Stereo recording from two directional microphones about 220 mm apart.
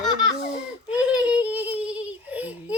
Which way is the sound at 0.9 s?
5° right (ahead or behind).